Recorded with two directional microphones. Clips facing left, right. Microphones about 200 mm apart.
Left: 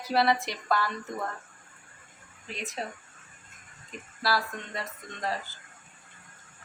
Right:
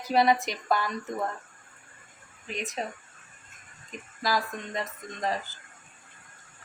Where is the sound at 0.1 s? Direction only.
20° right (ahead or behind).